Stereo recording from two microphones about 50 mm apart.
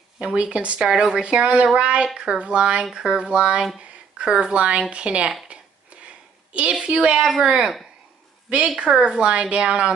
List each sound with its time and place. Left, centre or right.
0.2 s speech: centre
0.8 s speech: centre
6.5 s speech: right
8.7 s speech: right